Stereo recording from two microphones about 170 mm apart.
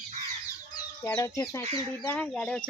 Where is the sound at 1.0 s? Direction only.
15° left (ahead or behind).